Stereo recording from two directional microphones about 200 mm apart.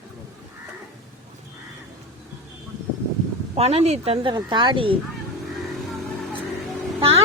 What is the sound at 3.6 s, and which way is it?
Speech, 30° right (ahead or behind).